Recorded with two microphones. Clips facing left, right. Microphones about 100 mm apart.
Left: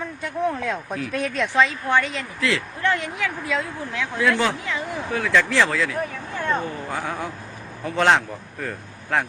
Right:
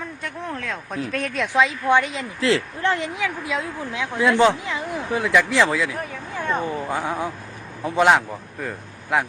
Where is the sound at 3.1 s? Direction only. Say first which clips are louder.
Even; 15° right (ahead or behind).